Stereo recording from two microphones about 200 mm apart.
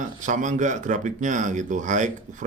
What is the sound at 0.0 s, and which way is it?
A man's voice, 40° right (ahead or behind).